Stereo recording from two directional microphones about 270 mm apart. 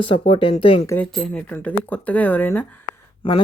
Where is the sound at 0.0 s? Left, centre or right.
Centre.